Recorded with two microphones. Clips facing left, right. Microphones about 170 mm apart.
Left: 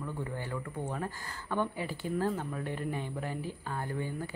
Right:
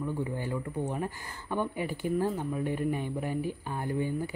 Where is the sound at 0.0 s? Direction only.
15° right (ahead or behind).